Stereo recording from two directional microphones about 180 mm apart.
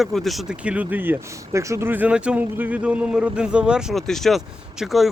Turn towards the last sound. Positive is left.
turn(degrees=0)  # may be behind; listen again after turning